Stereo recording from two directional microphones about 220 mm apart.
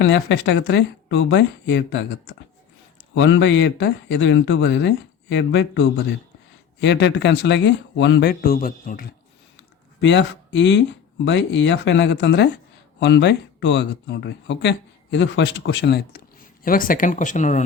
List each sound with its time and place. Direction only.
0.0 s speech: 55° left (ahead or behind)
6.8 s speech: 50° left (ahead or behind)
10.0 s speech: 55° left (ahead or behind); by 17.6 s 35° left (ahead or behind)